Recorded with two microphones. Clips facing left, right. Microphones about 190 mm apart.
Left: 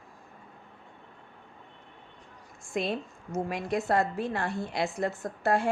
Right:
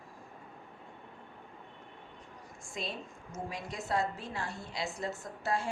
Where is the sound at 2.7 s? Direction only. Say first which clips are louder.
Left 10 dB; 60° left (ahead or behind).